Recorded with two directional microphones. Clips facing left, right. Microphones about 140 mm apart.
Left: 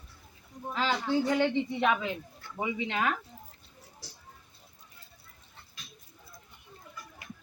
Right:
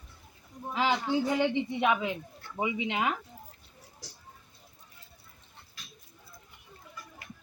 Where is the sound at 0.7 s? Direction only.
15° right (ahead or behind).